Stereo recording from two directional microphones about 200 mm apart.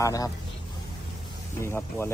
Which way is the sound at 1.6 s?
10° left (ahead or behind).